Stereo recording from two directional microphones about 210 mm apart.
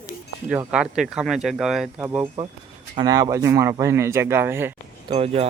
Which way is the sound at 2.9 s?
15° right (ahead or behind).